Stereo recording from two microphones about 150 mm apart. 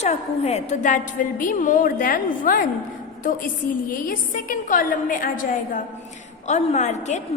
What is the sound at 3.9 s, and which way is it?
A woman's voice, 65° left (ahead or behind).